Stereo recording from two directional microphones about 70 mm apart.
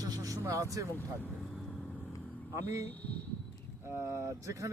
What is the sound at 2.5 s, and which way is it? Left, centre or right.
Speech, right.